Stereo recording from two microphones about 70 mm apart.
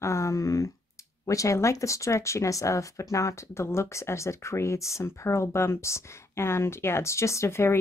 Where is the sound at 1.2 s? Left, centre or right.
Left.